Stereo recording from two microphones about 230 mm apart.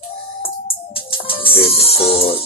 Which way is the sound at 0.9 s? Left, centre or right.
Left.